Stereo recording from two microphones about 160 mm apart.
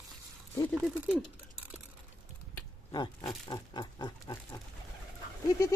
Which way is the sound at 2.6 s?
25° left (ahead or behind).